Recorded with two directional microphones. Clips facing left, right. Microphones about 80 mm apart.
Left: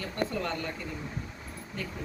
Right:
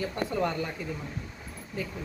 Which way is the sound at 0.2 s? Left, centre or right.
Centre.